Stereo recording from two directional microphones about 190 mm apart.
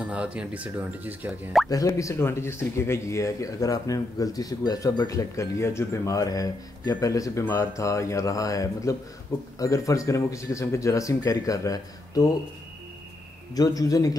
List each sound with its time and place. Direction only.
0.0 s speech: 5° right (ahead or behind)
1.7 s speech: 15° left (ahead or behind)
13.6 s a man's voice: 20° left (ahead or behind)